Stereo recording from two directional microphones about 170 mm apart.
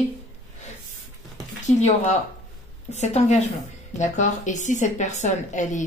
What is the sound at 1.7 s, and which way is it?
A woman's voice, 45° left (ahead or behind).